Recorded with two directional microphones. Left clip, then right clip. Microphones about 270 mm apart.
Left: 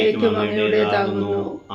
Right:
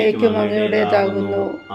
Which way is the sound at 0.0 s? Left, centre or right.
Right.